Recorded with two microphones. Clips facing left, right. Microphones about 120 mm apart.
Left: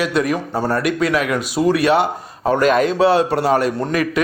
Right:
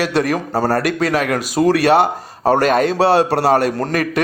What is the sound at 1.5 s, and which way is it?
A man's voice, 75° right (ahead or behind).